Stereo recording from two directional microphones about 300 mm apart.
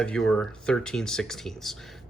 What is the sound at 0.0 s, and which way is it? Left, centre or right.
Speech, centre.